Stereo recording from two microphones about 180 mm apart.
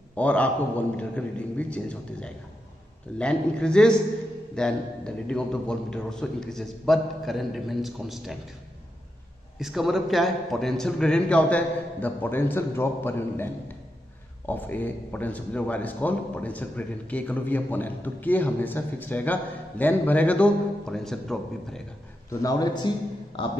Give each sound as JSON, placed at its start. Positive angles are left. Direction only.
{"t": 0.1, "sound": "a man's voice", "side_deg": 5}
{"t": 9.6, "sound": "a man's voice", "side_deg": 0}
{"t": 22.4, "sound": "a man's voice", "side_deg": 20}